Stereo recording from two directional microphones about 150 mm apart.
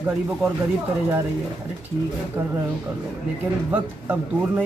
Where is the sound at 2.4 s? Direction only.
15° right (ahead or behind).